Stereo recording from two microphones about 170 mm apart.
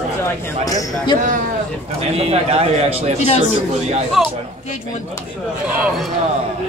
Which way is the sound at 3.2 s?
40° left (ahead or behind).